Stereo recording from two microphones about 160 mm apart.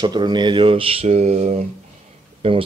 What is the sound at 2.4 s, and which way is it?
Speech, 35° right (ahead or behind).